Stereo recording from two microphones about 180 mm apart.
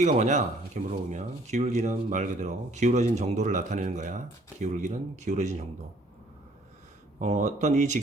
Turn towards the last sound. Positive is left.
turn(degrees=-40)  # may be behind; listen again after turning